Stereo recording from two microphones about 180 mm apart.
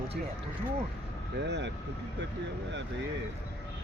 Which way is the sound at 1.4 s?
75° right (ahead or behind).